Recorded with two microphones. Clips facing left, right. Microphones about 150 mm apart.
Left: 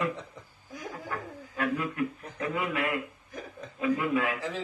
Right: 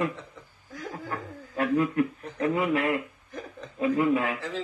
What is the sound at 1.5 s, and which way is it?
A man's voice, 35° right (ahead or behind).